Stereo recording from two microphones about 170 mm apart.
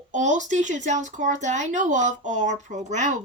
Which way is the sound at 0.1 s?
45° right (ahead or behind).